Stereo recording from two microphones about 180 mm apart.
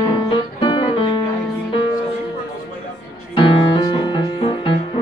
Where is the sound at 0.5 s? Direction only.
25° left (ahead or behind).